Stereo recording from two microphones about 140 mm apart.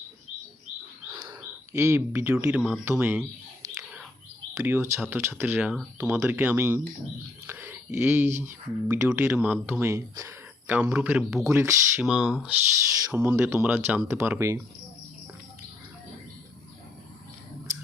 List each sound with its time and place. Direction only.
1.7 s speech: 15° right (ahead or behind)
2.6 s speech: centre (ahead or behind)
2.9 s speech: 10° right (ahead or behind)
4.5 s speech: 15° right (ahead or behind)
12.3 s speech: 5° right (ahead or behind)
13.1 s speech: 15° right (ahead or behind)